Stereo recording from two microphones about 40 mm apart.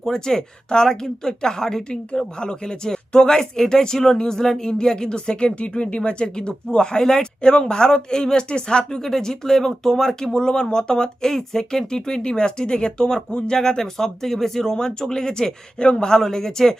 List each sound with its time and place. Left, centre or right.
0.1 s a woman's voice: centre
8.8 s speech: centre
16.1 s speech: centre